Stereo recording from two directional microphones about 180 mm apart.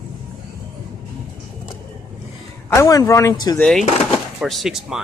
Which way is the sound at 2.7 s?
20° left (ahead or behind).